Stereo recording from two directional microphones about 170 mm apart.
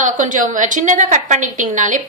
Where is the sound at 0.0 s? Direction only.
50° right (ahead or behind).